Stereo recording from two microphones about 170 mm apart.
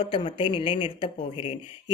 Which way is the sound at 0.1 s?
30° left (ahead or behind).